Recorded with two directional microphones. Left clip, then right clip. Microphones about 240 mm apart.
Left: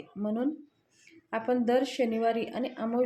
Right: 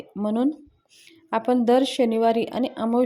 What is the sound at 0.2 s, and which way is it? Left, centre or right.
Speech, right.